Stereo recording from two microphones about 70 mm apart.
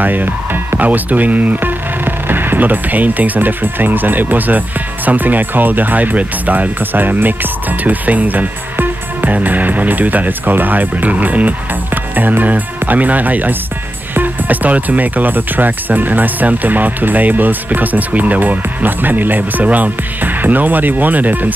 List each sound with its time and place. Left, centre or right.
0.0 s speech: right